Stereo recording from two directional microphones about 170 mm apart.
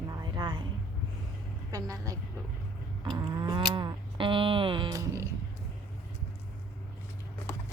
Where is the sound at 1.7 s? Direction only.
20° right (ahead or behind).